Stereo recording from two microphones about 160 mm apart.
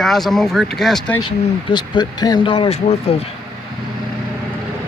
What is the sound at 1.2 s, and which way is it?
Speech, 30° left (ahead or behind).